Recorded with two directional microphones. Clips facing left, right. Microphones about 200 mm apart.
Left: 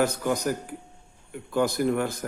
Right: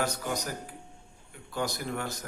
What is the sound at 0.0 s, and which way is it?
A man's voice, 55° left (ahead or behind).